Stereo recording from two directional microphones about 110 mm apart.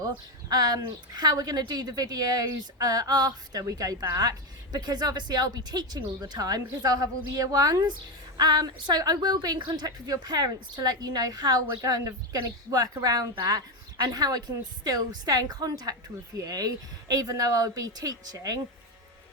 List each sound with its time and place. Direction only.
0.0 s speech: 35° right (ahead or behind)